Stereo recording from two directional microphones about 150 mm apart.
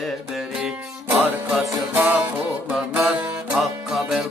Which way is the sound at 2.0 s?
10° right (ahead or behind).